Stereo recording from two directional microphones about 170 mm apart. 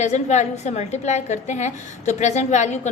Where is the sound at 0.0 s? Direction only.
45° left (ahead or behind).